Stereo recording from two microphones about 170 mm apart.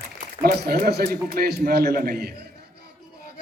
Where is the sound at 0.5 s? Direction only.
70° right (ahead or behind).